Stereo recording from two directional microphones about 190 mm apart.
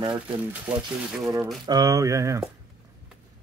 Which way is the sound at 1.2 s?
15° right (ahead or behind).